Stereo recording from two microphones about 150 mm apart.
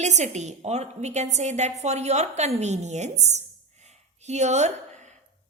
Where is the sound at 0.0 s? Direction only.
50° right (ahead or behind).